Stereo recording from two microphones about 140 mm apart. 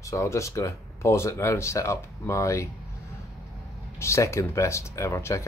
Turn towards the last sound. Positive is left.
turn(degrees=20)  # may be behind; listen again after turning